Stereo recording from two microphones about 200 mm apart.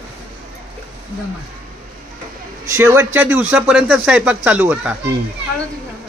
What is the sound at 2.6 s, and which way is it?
Speech, 15° right (ahead or behind).